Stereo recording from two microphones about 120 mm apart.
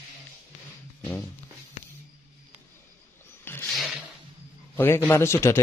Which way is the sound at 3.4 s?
20° left (ahead or behind).